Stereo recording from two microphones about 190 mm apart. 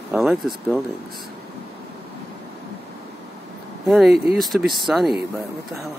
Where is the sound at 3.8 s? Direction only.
Centre (ahead or behind).